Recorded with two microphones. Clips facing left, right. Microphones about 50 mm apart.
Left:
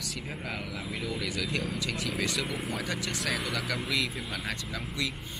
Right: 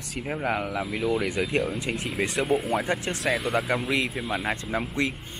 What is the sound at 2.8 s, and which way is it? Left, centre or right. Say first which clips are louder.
Speech: right 6 dB; right.